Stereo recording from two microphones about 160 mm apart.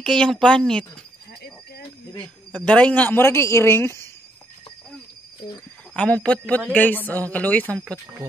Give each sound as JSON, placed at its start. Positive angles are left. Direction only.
{"t": 0.0, "sound": "speech", "side_deg": 5}
{"t": 2.2, "sound": "speech", "side_deg": 5}
{"t": 5.9, "sound": "speech", "side_deg": 5}